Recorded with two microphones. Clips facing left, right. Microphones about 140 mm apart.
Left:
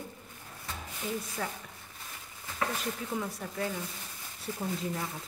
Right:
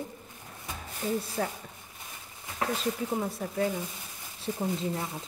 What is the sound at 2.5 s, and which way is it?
Speech, 30° right (ahead or behind).